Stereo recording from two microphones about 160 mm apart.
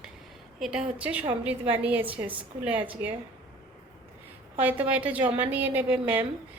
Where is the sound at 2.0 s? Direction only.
35° right (ahead or behind).